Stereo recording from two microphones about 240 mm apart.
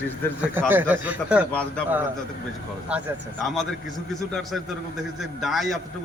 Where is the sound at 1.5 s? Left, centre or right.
Centre.